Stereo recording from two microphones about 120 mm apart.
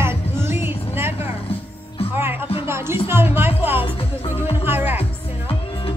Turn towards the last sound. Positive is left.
turn(degrees=-15)  # may be behind; listen again after turning